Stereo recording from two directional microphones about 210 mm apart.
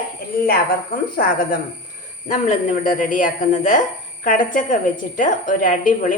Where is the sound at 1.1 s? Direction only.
40° left (ahead or behind).